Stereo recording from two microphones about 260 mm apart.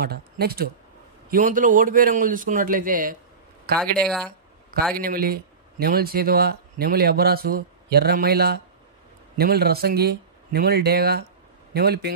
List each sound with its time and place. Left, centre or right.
0.0 s speech: right
4.0 s speech: centre
4.9 s speech: right